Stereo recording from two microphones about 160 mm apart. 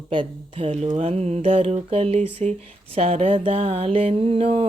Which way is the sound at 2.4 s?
45° right (ahead or behind).